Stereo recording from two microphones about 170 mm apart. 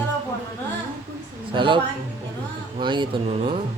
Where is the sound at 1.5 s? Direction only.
30° right (ahead or behind).